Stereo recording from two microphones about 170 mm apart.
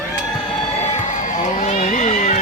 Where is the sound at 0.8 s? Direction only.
45° left (ahead or behind).